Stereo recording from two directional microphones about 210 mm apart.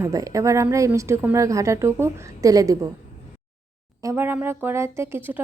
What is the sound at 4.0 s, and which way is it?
A woman's voice, 15° right (ahead or behind).